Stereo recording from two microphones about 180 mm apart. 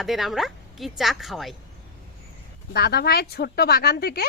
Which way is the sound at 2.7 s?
65° left (ahead or behind).